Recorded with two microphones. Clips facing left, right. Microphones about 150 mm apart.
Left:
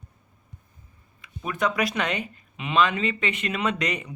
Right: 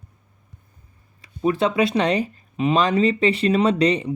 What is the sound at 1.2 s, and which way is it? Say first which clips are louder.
Speech: right 7 dB; 30° right (ahead or behind).